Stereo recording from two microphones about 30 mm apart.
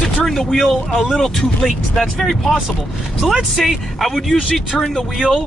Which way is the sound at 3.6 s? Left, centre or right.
Centre.